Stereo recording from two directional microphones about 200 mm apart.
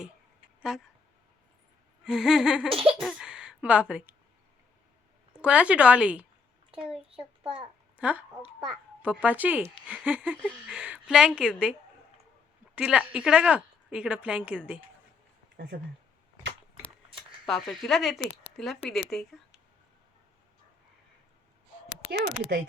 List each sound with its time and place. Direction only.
0.7 s speech: 5° right (ahead or behind)
2.0 s speech: 5° right (ahead or behind)
5.4 s a child's voice: 5° right (ahead or behind)
9.2 s a woman's voice: 10° right (ahead or behind)
12.7 s a woman's voice: 5° right (ahead or behind)
15.5 s speech: 60° right (ahead or behind)
17.4 s speech: centre (ahead or behind)
22.1 s speech: 55° right (ahead or behind)